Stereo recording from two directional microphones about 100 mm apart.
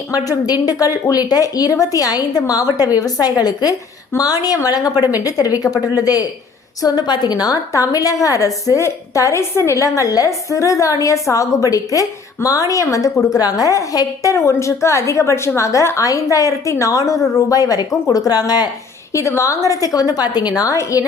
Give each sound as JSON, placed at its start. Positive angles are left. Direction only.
{"t": 0.1, "sound": "a woman's voice", "side_deg": 40}
{"t": 19.1, "sound": "a woman's voice", "side_deg": 30}